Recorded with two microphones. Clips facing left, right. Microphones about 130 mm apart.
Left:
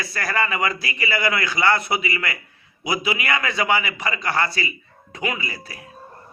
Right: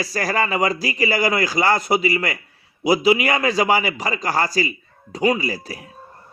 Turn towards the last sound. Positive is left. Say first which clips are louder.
# right 8 dB
turn(degrees=-35)  # may be behind; listen again after turning